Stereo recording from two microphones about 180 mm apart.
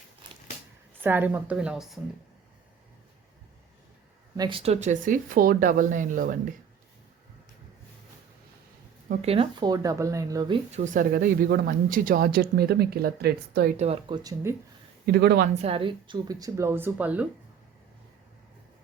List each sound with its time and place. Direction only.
1.0 s a woman's voice: 10° right (ahead or behind)
4.4 s speech: 30° right (ahead or behind); by 6.3 s 50° right (ahead or behind)
9.2 s speech: 30° right (ahead or behind)
10.7 s speech: 40° right (ahead or behind); by 13.7 s 60° right (ahead or behind)
13.7 s speech: 35° right (ahead or behind)
14.2 s speech: 20° right (ahead or behind)
15.0 s speech: 60° right (ahead or behind)
15.6 s speech: 30° right (ahead or behind); by 17.2 s 10° right (ahead or behind)